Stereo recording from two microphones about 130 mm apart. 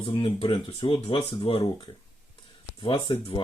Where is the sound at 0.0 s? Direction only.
35° left (ahead or behind).